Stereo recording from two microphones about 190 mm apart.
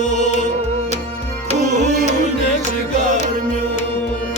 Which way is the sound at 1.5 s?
35° right (ahead or behind).